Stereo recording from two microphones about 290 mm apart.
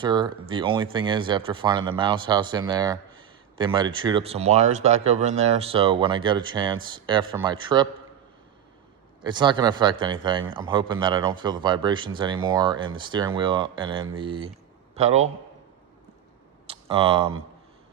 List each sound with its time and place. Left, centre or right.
0.0 s speech: centre
9.2 s speech: centre
16.6 s speech: centre